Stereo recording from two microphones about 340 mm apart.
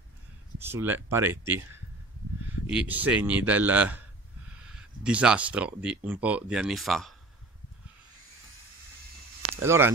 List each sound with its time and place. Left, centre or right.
0.6 s speech: centre
9.6 s speech: centre